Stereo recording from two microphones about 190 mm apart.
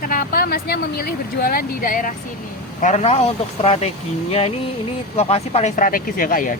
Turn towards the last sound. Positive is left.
turn(degrees=45)  # may be behind; listen again after turning